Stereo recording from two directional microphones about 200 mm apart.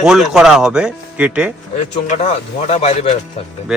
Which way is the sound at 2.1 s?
35° left (ahead or behind).